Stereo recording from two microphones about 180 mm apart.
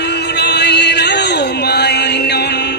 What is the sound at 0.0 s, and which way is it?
Music, 70° left (ahead or behind).